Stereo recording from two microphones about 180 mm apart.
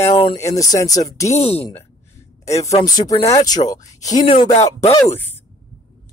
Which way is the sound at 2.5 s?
15° left (ahead or behind).